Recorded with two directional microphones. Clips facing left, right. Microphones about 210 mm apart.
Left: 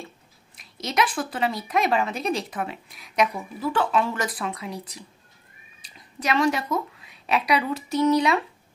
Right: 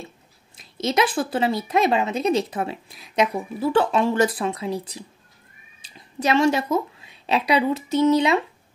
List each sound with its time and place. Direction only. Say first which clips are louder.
0.7 s a woman's voice: right 4 dB; 25° right (ahead or behind)